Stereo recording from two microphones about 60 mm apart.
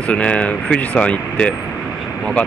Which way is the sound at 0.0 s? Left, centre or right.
Centre.